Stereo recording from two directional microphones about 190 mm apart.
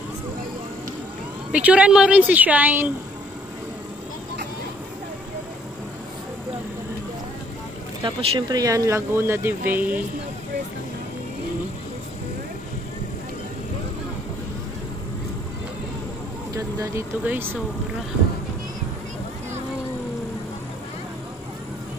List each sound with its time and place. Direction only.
1.5 s speech: 5° right (ahead or behind)
8.0 s speech: 25° right (ahead or behind); by 10.0 s 10° right (ahead or behind)
16.5 s speech: 15° right (ahead or behind)